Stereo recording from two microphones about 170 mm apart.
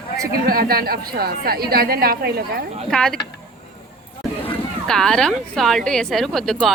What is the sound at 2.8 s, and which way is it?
Speech, 5° left (ahead or behind).